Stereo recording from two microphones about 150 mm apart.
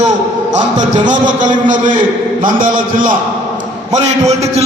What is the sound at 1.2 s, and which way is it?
A man's voice, 60° right (ahead or behind).